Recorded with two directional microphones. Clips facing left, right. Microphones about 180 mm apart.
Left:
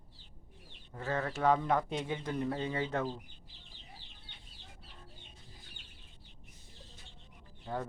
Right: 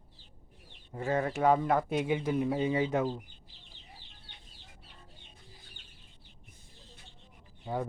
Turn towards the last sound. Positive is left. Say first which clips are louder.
# right 3 dB
turn(degrees=-15)  # may be behind; listen again after turning